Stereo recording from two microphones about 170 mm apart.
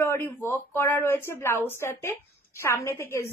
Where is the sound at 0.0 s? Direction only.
15° left (ahead or behind).